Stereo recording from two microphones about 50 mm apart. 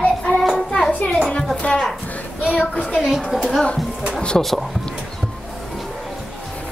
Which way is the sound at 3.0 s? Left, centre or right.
Centre.